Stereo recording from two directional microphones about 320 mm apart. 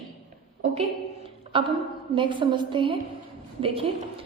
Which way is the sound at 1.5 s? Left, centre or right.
Centre.